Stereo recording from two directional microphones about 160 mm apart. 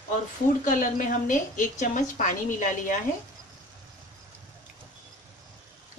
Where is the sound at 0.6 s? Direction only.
55° left (ahead or behind).